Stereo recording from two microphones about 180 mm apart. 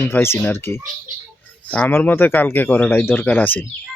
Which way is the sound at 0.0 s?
15° left (ahead or behind).